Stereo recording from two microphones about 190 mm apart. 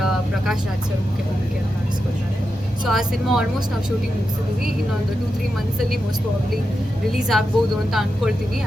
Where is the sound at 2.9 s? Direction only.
Centre (ahead or behind).